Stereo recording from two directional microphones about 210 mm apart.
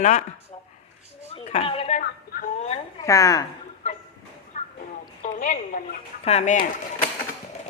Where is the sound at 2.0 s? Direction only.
40° left (ahead or behind).